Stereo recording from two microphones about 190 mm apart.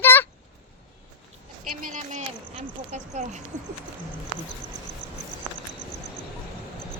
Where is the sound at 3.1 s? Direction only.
35° right (ahead or behind).